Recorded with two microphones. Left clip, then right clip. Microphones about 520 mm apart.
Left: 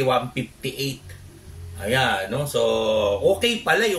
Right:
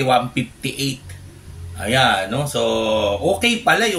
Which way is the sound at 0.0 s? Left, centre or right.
Left.